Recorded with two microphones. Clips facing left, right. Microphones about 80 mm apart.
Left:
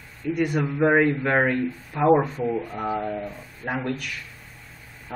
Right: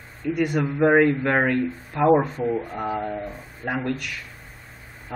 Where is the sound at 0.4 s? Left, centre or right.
Centre.